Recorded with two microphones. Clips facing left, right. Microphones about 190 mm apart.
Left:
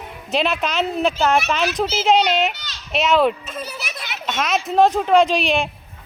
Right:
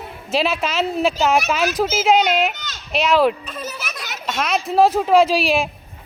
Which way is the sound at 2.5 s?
50° right (ahead or behind).